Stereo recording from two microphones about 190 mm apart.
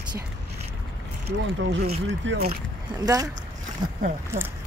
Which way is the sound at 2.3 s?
75° right (ahead or behind).